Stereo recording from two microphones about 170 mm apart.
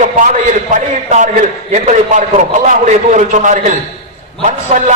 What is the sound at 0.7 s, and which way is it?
A man's voice, 45° right (ahead or behind).